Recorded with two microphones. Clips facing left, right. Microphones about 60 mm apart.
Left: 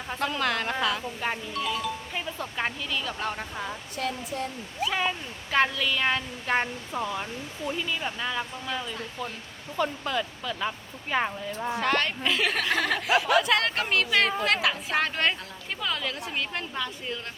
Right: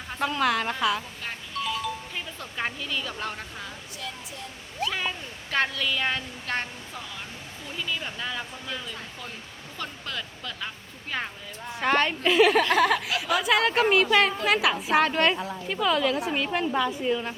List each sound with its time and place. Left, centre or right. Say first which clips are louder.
0.2 s speech: right 3 dB; centre
4.8 s speech: left 2 dB; centre
6.9 s speech: left 8 dB; left
7.8 s speech: right 2 dB; centre
11.8 s a woman's voice: right 4 dB; centre